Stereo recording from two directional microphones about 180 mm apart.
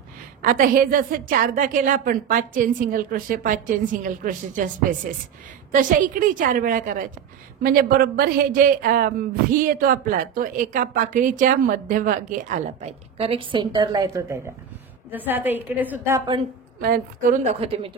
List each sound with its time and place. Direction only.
0.4 s a woman's voice: 50° right (ahead or behind)
5.7 s a woman's voice: 50° right (ahead or behind); by 16.2 s 10° right (ahead or behind)
16.8 s a woman's voice: 50° right (ahead or behind); by 17.9 s 35° right (ahead or behind)